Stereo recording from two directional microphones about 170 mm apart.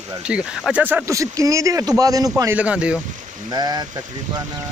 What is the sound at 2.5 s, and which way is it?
Speech, 5° right (ahead or behind).